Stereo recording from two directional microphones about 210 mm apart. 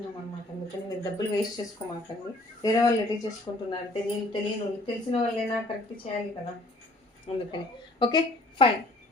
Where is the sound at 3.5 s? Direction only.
20° left (ahead or behind).